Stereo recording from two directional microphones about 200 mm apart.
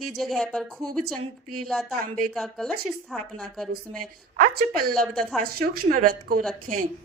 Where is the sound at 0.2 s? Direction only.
Centre (ahead or behind).